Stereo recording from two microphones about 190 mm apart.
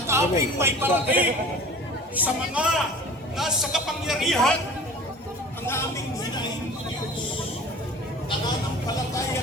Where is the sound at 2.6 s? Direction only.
5° right (ahead or behind).